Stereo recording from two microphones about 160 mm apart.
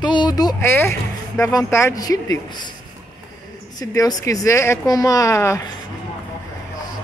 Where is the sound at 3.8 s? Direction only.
20° left (ahead or behind).